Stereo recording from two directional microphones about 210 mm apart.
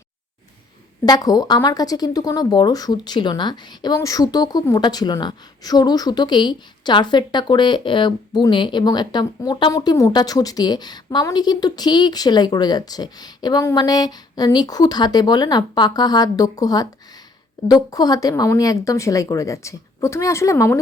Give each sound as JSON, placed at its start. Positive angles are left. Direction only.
{"t": 1.0, "sound": "a woman's voice", "side_deg": 20}